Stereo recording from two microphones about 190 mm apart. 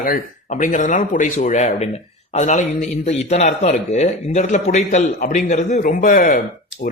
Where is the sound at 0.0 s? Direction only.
45° left (ahead or behind).